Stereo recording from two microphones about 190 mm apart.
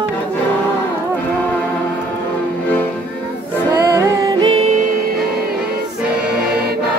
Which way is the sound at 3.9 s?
25° right (ahead or behind).